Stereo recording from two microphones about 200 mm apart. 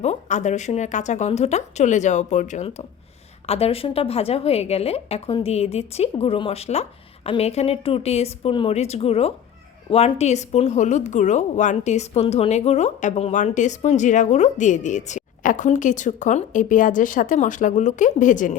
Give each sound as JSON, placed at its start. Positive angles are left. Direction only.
{"t": 0.0, "sound": "a woman's voice", "side_deg": 35}